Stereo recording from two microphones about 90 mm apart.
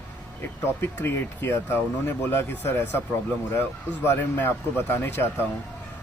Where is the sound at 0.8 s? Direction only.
25° left (ahead or behind).